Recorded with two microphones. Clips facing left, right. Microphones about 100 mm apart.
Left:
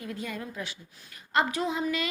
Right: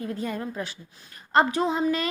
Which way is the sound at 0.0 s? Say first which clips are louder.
Right 6 dB; 35° right (ahead or behind).